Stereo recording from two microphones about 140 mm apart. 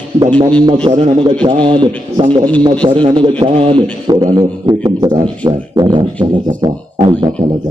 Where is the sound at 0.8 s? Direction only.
35° right (ahead or behind).